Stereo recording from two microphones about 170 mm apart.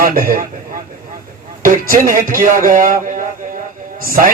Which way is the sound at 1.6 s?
55° right (ahead or behind).